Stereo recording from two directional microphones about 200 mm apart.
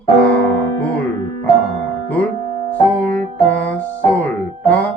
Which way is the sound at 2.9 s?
5° left (ahead or behind).